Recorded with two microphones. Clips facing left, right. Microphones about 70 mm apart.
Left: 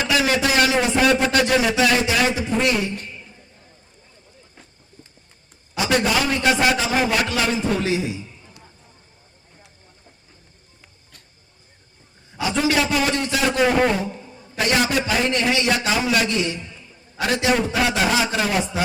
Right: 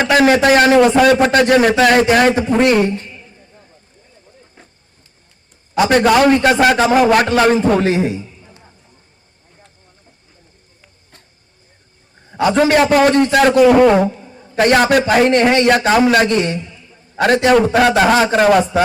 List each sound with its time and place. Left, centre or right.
0.0 s a man's voice: right
0.9 s a man's voice: right
5.7 s a man's voice: right
8.4 s basketball bounce: centre
12.3 s a man's voice: right
13.7 s a man's voice: right
14.5 s a man's voice: right